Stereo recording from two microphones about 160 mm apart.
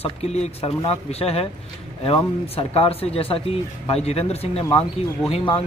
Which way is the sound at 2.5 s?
40° left (ahead or behind).